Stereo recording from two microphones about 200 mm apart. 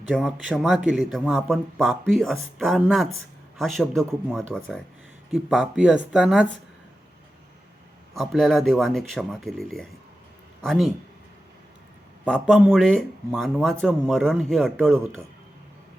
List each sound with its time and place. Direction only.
0.1 s speech: centre (ahead or behind)
8.1 s speech: centre (ahead or behind)
12.2 s speech: 5° left (ahead or behind)